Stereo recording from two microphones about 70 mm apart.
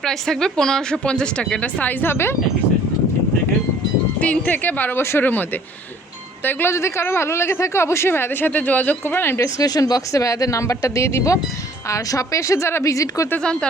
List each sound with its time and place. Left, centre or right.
0.0 s speech: centre; by 2.3 s left
4.2 s speech: left
6.7 s speech: left
9.4 s speech: left
13.4 s speech: centre